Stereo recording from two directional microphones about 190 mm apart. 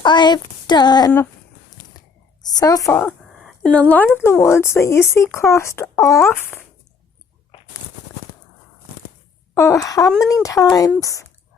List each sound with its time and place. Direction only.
0.0 s child singing: 25° left (ahead or behind)
2.4 s child singing: 20° left (ahead or behind)
3.2 s speech: centre (ahead or behind)
9.6 s speech: 15° left (ahead or behind)